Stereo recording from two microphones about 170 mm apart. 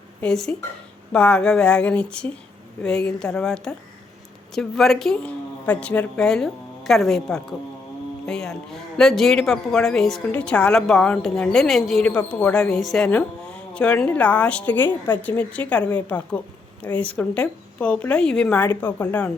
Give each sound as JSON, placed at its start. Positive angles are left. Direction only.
{"t": 0.2, "sound": "a woman's voice", "side_deg": 5}